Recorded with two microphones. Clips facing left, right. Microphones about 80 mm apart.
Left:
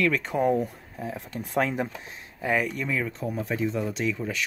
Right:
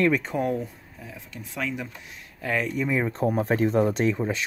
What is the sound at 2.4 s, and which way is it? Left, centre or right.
Speech, centre.